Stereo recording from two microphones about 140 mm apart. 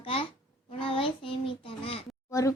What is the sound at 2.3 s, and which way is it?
Speech, 20° left (ahead or behind).